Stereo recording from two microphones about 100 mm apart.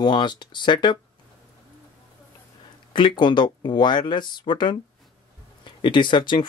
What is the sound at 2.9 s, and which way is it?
Speech, 55° left (ahead or behind).